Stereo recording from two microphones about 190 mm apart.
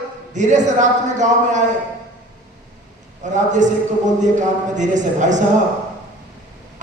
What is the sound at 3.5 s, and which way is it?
A man's voice, 40° right (ahead or behind).